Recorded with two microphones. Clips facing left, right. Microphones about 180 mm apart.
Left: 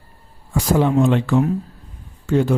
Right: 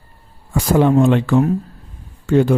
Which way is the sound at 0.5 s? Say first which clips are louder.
Right 3 dB; 60° right (ahead or behind).